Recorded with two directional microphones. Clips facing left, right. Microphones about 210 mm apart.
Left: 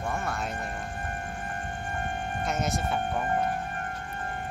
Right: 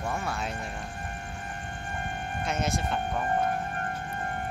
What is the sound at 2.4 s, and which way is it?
Speech, centre (ahead or behind).